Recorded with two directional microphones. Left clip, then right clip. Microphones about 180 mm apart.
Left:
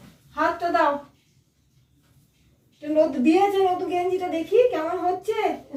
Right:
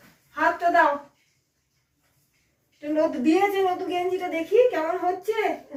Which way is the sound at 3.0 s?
5° left (ahead or behind).